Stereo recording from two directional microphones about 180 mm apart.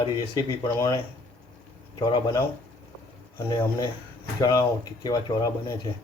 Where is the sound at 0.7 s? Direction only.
15° left (ahead or behind).